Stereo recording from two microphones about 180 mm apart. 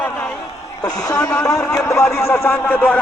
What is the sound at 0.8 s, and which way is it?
A man's voice, 20° left (ahead or behind).